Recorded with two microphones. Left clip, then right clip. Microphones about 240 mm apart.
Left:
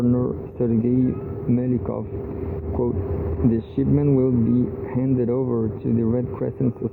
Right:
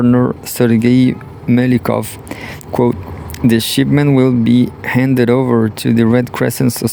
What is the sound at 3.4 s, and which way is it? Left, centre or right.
Speech, right.